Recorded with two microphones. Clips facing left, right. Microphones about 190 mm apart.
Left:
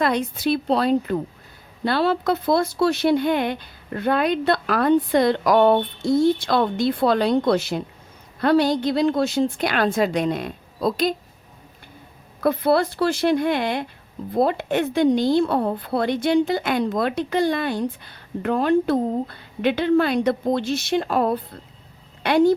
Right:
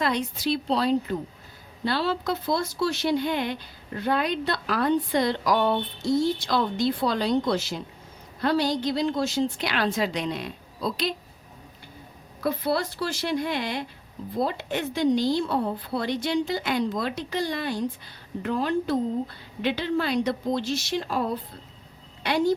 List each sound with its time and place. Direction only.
0.0 s a woman's voice: 55° left (ahead or behind)
12.4 s a woman's voice: 55° left (ahead or behind)